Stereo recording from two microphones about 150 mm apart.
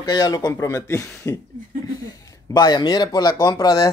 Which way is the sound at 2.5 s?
30° left (ahead or behind).